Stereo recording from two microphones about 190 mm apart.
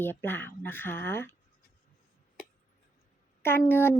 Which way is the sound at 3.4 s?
10° left (ahead or behind).